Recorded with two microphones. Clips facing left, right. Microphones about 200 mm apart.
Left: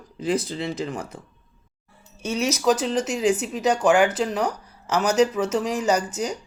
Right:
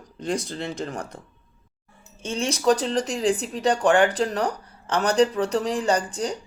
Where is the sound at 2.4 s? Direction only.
5° left (ahead or behind).